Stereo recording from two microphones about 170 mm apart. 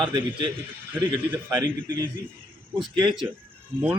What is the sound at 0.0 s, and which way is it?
A man's voice, 30° right (ahead or behind).